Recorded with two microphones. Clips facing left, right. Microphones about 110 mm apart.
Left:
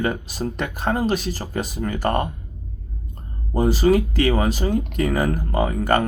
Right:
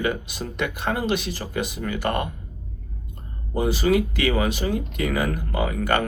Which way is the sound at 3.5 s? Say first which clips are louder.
Left 3 dB; 40° left (ahead or behind).